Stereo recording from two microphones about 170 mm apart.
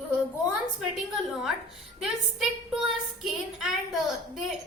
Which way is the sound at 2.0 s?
Centre (ahead or behind).